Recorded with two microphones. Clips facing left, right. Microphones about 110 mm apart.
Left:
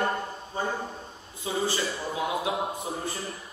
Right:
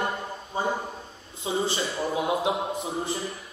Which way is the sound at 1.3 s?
25° right (ahead or behind).